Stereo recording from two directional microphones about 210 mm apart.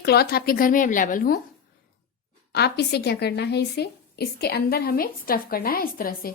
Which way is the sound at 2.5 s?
50° left (ahead or behind).